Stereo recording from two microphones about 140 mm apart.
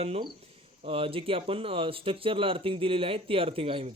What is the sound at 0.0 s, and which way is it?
Speech, 45° right (ahead or behind).